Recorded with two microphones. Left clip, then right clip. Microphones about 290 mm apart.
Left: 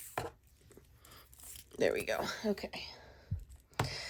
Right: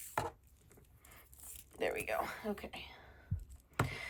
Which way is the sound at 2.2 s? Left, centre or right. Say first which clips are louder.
Left 5 dB; centre.